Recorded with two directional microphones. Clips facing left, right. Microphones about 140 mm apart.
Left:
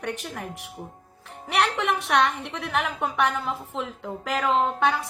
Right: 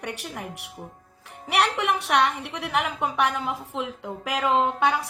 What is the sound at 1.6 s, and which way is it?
A woman's voice, 15° right (ahead or behind).